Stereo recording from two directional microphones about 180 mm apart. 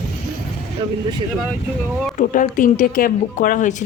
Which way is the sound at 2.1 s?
45° left (ahead or behind).